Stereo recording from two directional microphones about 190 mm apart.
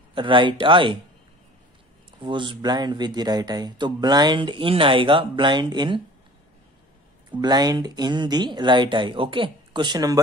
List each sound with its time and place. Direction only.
0.1 s speech: 25° right (ahead or behind)
2.1 s speech: 25° right (ahead or behind)
7.2 s speech: 20° right (ahead or behind)